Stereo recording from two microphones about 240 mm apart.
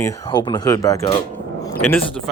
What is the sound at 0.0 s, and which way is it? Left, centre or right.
Speech, centre.